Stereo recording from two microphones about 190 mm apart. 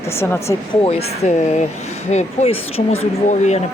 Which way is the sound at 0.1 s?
15° left (ahead or behind).